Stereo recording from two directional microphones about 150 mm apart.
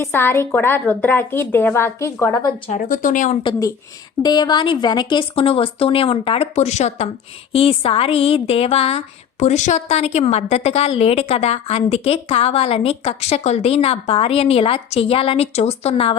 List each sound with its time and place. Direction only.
0.0 s a woman's voice: 15° left (ahead or behind)
2.6 s speech: 60° left (ahead or behind)
4.2 s a woman's voice: 25° left (ahead or behind)